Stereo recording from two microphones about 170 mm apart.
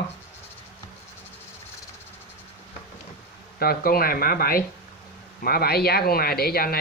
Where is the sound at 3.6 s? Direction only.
65° left (ahead or behind).